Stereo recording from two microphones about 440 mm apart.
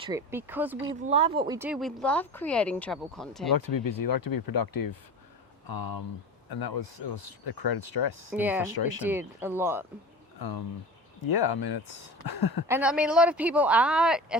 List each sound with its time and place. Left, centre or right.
0.0 s speech: centre
0.9 s speech: centre
3.5 s speech: left
8.3 s speech: centre
11.2 s speech: left
12.6 s speech: centre